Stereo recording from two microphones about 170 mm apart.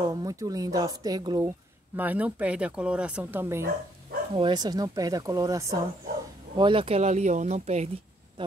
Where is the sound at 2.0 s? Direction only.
10° right (ahead or behind).